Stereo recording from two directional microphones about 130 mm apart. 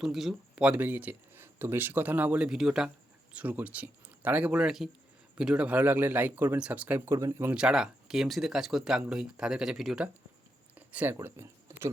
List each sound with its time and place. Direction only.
0.0 s speech: centre (ahead or behind); by 7.5 s 25° right (ahead or behind)
7.5 s speech: 5° right (ahead or behind)
10.8 s a sound: 15° right (ahead or behind)